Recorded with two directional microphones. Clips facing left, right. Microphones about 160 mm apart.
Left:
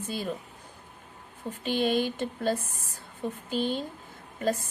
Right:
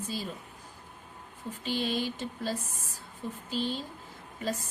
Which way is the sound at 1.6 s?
55° left (ahead or behind).